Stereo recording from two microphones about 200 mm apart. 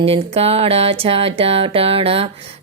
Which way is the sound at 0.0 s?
30° right (ahead or behind).